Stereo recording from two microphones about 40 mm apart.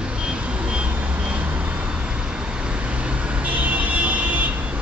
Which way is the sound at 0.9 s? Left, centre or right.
Right.